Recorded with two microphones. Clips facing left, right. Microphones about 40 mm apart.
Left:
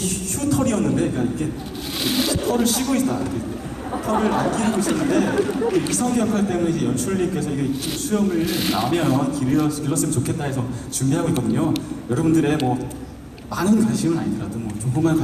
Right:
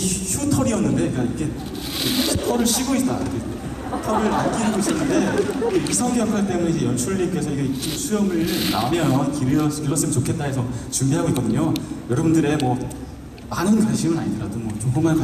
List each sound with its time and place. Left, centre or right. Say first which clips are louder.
0.4 s a man's voice: even; centre